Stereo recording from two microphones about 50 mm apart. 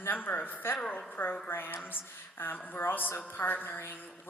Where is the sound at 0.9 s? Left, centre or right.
Left.